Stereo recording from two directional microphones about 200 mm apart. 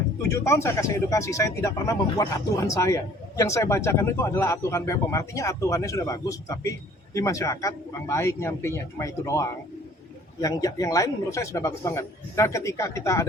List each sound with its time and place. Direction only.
0.2 s speech: 15° left (ahead or behind)